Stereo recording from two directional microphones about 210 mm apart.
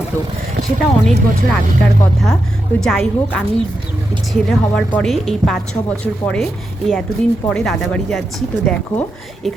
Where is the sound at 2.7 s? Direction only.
Centre (ahead or behind).